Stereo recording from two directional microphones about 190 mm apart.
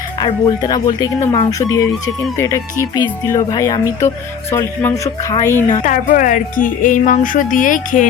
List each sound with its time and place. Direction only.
0.6 s speech: 20° left (ahead or behind)
2.9 s speech: 20° left (ahead or behind)
5.8 s music: 45° left (ahead or behind)